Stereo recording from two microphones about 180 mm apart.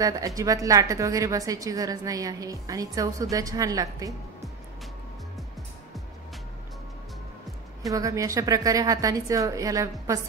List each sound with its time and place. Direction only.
0.0 s a woman's voice: 20° right (ahead or behind)
7.9 s a woman's voice: 20° right (ahead or behind)